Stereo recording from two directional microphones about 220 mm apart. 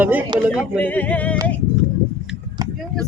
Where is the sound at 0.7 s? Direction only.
10° left (ahead or behind).